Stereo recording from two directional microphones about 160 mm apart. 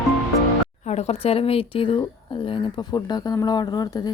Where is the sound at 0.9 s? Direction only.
40° left (ahead or behind).